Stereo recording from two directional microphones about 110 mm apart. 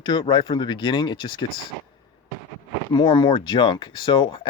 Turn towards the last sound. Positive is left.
turn(degrees=45)  # may be behind; listen again after turning